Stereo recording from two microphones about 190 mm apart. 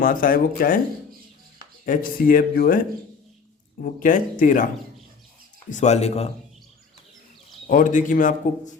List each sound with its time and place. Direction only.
0.0 s speech: 45° left (ahead or behind)
1.8 s speech: 45° left (ahead or behind)
5.7 s speech: 35° left (ahead or behind)
7.7 s speech: 45° left (ahead or behind)